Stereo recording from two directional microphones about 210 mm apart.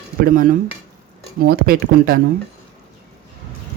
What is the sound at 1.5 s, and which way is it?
Speech, 45° right (ahead or behind).